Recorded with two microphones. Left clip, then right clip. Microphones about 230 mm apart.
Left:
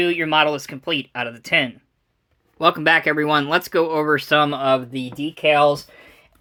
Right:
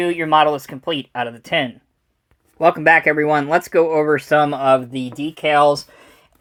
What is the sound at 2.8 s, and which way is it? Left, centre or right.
Speech, centre.